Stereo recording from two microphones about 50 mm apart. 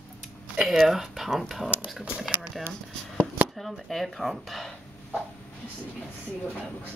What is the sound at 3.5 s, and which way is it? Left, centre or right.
Speech, centre.